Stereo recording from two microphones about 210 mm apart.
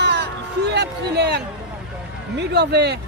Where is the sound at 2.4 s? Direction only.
50° right (ahead or behind).